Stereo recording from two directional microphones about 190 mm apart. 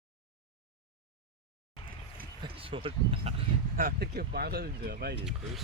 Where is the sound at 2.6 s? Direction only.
30° right (ahead or behind).